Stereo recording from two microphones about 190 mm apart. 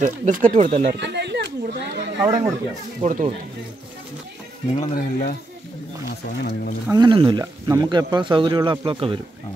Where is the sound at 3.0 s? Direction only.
40° right (ahead or behind).